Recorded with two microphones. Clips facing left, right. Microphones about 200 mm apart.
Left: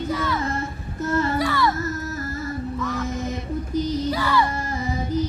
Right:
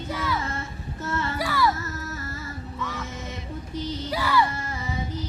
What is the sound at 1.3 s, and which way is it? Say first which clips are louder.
Baby cry: left 3 dB; 5° right (ahead or behind).